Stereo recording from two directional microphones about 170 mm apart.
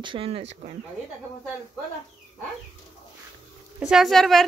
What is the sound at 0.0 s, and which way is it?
Speech, 30° right (ahead or behind).